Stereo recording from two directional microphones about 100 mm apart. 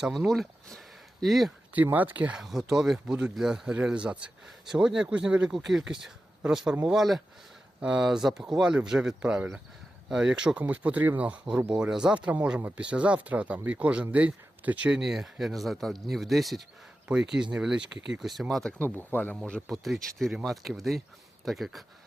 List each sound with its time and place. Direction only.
0.3 s speech: centre (ahead or behind)
1.7 s speech: 15° right (ahead or behind)
2.4 s speech: 5° right (ahead or behind)
18.9 s speech: 15° left (ahead or behind)
19.6 s speech: centre (ahead or behind)